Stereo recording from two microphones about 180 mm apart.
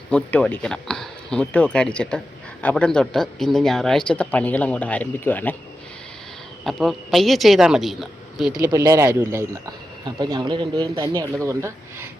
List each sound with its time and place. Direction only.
0.1 s speech: 5° left (ahead or behind)
6.7 s speech: centre (ahead or behind)
8.6 s speech: 20° right (ahead or behind)